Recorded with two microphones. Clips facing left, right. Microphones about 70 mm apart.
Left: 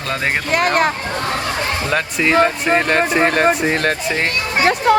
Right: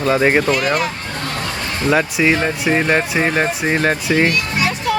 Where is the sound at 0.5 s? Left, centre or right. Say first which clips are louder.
Left 2 dB; left.